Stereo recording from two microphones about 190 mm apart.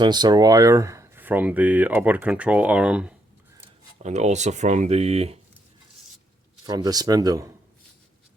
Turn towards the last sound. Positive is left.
turn(degrees=-20)  # may be behind; listen again after turning